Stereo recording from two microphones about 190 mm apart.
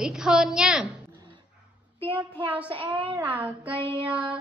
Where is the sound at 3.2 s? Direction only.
10° right (ahead or behind).